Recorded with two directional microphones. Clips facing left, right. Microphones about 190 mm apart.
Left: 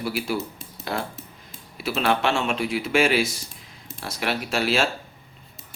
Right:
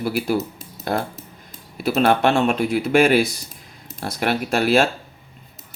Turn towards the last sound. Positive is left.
turn(degrees=-55)  # may be behind; listen again after turning